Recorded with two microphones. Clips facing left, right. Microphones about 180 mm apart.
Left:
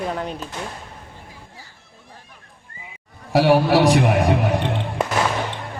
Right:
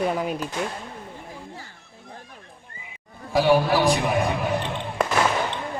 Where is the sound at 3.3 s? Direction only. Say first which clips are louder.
Left 4 dB; 75° left (ahead or behind).